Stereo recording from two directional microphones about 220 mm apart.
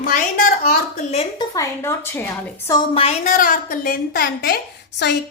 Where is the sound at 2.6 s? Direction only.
20° left (ahead or behind); by 5.2 s 50° left (ahead or behind).